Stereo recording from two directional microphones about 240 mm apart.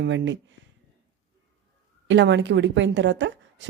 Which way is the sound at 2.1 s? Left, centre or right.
Right.